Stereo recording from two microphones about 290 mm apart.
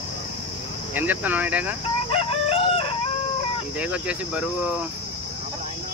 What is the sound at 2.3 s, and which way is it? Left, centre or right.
Chicken, left.